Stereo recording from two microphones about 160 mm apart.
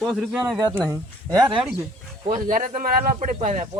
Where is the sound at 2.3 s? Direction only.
55° right (ahead or behind).